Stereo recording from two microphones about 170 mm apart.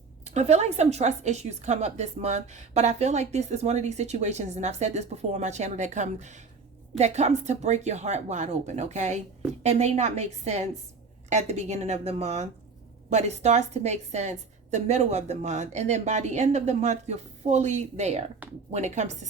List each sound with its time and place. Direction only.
0.3 s a woman's voice: 40° right (ahead or behind)